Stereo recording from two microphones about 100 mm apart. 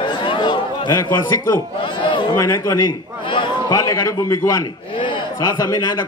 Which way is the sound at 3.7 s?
35° left (ahead or behind).